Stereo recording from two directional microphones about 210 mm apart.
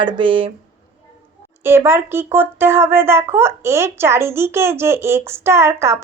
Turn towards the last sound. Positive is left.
turn(degrees=-10)  # may be behind; listen again after turning